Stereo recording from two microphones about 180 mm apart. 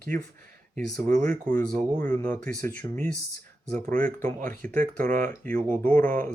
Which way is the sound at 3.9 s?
45° right (ahead or behind).